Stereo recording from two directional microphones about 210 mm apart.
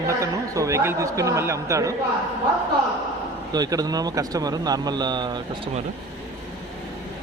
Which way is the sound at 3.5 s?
20° right (ahead or behind).